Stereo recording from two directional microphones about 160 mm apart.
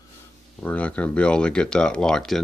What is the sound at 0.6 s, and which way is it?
Speech, 10° left (ahead or behind).